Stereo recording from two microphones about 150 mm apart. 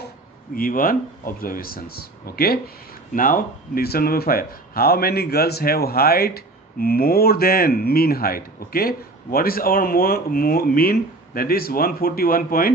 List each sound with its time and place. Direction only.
0.6 s speech: 70° left (ahead or behind); by 2.6 s 90° left
3.2 s speech: 65° left (ahead or behind)